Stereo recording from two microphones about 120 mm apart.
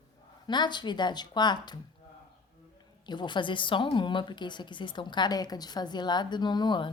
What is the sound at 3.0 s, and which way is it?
A woman's voice, 40° left (ahead or behind).